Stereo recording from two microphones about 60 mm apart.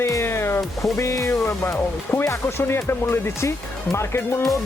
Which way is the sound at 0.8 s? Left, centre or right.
Left.